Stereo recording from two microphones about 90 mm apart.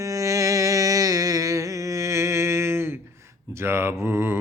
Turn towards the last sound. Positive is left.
turn(degrees=-30)  # may be behind; listen again after turning